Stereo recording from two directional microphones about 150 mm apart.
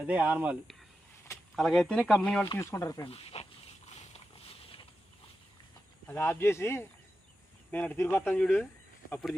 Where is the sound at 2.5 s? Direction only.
20° left (ahead or behind).